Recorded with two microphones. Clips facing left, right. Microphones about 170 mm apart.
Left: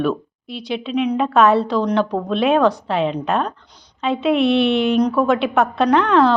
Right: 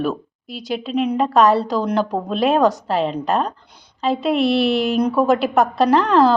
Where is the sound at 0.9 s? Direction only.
5° right (ahead or behind).